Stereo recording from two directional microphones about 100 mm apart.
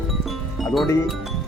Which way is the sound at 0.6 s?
Centre (ahead or behind).